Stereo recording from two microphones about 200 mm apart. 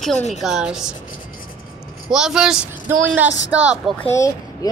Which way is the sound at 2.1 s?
Centre (ahead or behind).